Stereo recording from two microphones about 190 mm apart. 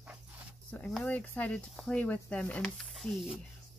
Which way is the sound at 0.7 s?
5° left (ahead or behind).